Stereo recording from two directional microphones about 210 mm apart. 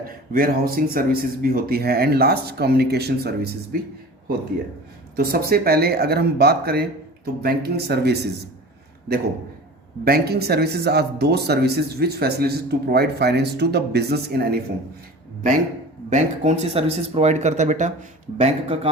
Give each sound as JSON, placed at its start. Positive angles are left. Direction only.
{"t": 0.0, "sound": "speech", "side_deg": -45}
{"t": 5.1, "sound": "speech", "side_deg": -45}
{"t": 10.0, "sound": "speech", "side_deg": -50}
{"t": 16.0, "sound": "speech", "side_deg": -35}